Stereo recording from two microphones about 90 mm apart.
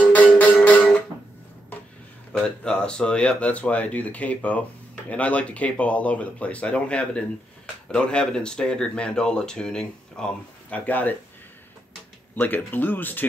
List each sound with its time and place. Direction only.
0.0 s music: 15° left (ahead or behind)
2.3 s speech: 10° left (ahead or behind)
12.4 s speech: 20° left (ahead or behind)